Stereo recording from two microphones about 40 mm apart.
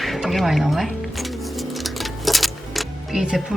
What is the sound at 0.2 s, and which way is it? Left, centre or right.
Speech, centre.